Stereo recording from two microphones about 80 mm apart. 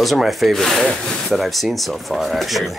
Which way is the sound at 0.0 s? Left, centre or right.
Centre.